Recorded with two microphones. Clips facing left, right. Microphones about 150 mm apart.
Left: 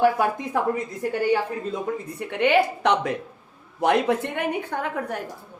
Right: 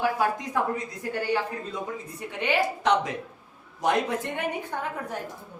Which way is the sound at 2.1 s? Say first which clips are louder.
Left 6 dB; 60° left (ahead or behind).